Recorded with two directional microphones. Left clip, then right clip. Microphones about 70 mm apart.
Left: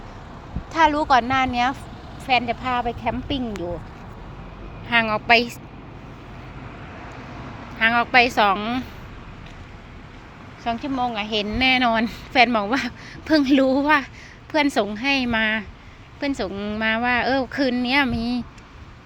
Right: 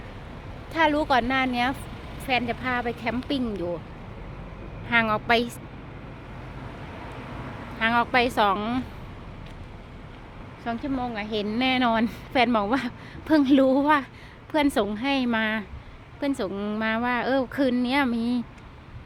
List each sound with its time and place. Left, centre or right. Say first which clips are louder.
0.7 s speech: left 5 dB; right
4.9 s a woman's voice: left 4 dB; centre
6.9 s vehicle: even; centre
7.8 s a woman's voice: left 5 dB; centre
8.5 s a woman's voice: left 3 dB; centre
10.6 s a woman's voice: left 6 dB; centre
16.5 s speech: left 2 dB; right
16.8 s a woman's voice: left 5 dB; centre